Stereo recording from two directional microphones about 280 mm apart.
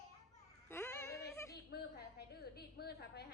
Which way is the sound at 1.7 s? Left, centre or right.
Left.